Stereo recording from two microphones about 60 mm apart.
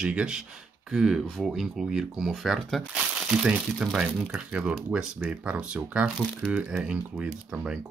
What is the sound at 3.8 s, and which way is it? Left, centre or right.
Speech, centre.